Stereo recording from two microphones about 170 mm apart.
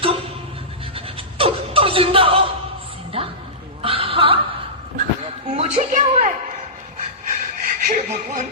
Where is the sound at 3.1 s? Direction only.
30° right (ahead or behind).